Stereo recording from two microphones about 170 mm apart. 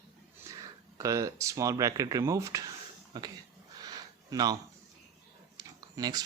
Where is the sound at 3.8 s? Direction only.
20° right (ahead or behind).